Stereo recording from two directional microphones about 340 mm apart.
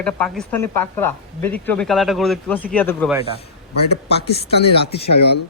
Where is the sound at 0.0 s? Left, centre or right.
Centre.